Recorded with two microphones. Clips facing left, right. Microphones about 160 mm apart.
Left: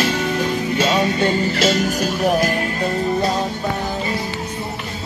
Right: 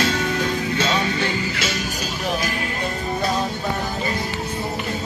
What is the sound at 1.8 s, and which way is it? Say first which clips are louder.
Music: left 8 dB; 55° left (ahead or behind).